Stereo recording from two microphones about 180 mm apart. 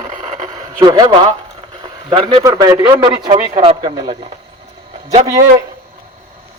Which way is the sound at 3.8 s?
20° right (ahead or behind).